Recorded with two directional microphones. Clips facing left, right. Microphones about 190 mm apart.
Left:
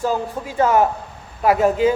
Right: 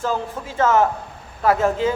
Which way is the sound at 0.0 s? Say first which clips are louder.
Left 2 dB; 15° left (ahead or behind).